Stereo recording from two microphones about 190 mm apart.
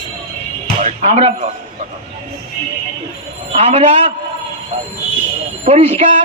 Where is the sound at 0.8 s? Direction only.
35° right (ahead or behind).